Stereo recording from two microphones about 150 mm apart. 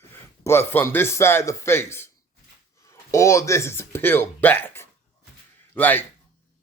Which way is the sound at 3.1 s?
20° left (ahead or behind).